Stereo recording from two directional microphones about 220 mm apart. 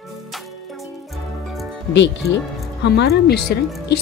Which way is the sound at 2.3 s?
50° left (ahead or behind).